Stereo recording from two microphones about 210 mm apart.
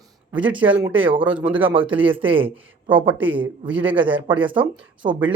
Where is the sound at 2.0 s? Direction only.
25° right (ahead or behind).